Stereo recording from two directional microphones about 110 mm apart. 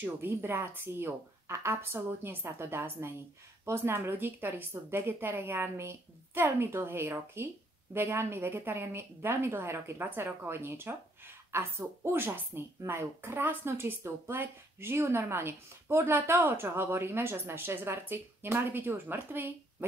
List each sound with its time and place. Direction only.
0.0 s a woman's voice: 20° right (ahead or behind)